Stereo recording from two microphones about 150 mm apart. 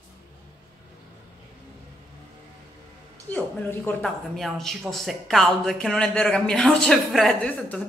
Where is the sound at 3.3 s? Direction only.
15° left (ahead or behind).